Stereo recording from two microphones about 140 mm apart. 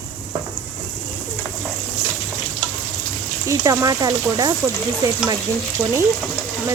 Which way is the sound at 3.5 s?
25° right (ahead or behind).